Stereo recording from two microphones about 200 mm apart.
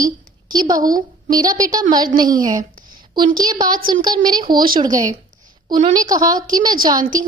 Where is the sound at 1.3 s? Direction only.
20° right (ahead or behind).